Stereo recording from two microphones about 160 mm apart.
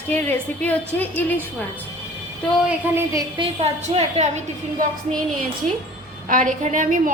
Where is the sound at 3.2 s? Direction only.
30° right (ahead or behind).